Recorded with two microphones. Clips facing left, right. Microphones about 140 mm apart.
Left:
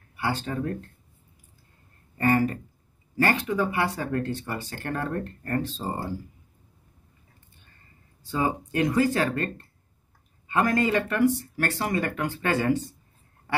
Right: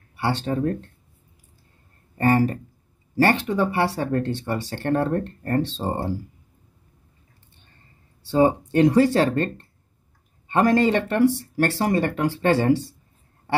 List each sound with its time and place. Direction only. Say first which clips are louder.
0.5 s speech: right 6 dB; 35° right (ahead or behind)
2.1 s speech: right 3 dB; 35° right (ahead or behind)
8.3 s speech: right 8 dB; 30° right (ahead or behind)